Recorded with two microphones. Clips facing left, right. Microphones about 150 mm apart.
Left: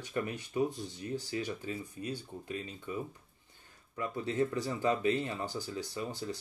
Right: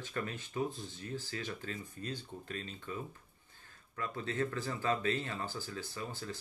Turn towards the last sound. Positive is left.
turn(degrees=20)  # may be behind; listen again after turning